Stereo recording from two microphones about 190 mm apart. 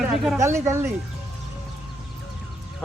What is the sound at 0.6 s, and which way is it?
Speech, 15° right (ahead or behind).